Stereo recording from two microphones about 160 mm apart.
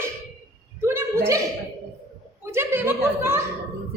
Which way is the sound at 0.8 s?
15° right (ahead or behind).